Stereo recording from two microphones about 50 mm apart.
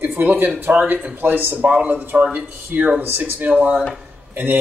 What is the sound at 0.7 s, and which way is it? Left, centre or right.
Speech, right.